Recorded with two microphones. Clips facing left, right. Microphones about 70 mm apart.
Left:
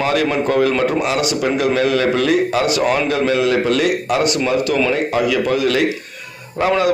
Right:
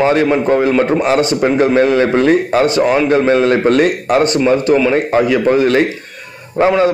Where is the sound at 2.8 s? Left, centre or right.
Centre.